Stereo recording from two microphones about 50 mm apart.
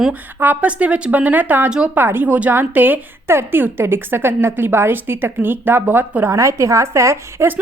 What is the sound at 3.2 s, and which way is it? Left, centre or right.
A woman's voice, right.